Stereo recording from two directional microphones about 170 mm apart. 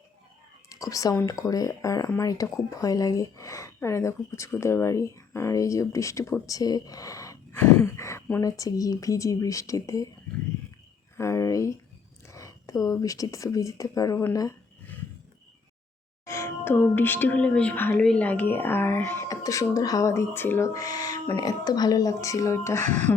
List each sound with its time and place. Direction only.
0.7 s a sound: 20° left (ahead or behind)
1.3 s speech: 20° left (ahead or behind)
11.2 s a woman's voice: 15° left (ahead or behind)
16.2 s a woman's voice: 15° left (ahead or behind)
22.8 s speech: 45° right (ahead or behind)